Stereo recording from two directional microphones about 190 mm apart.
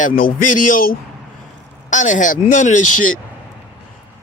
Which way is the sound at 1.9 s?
40° left (ahead or behind).